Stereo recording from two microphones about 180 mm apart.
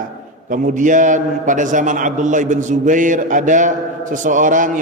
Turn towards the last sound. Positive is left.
turn(degrees=-45)  # may be behind; listen again after turning